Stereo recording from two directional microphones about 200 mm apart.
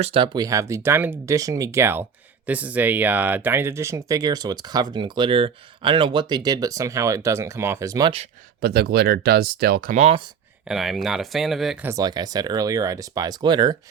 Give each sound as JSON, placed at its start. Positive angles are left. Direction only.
{"t": 0.0, "sound": "speech", "side_deg": -25}
{"t": 8.6, "sound": "speech", "side_deg": -50}
{"t": 10.7, "sound": "speech", "side_deg": 0}
{"t": 11.9, "sound": "speech", "side_deg": -20}